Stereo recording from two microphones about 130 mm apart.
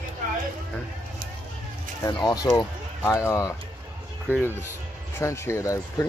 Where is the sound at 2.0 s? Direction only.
30° left (ahead or behind).